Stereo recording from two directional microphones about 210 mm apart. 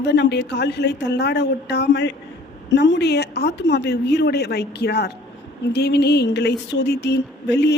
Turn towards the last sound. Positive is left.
turn(degrees=55)  # may be behind; listen again after turning